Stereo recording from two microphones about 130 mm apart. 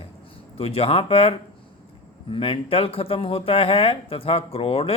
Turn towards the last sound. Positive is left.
turn(degrees=50)  # may be behind; listen again after turning